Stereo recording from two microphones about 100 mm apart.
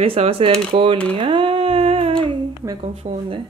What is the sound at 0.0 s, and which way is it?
Speech, 70° right (ahead or behind).